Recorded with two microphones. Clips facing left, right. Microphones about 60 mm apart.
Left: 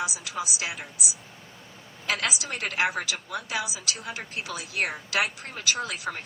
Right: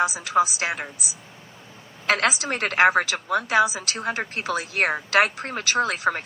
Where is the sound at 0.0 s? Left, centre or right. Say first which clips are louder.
Right 11 dB; right.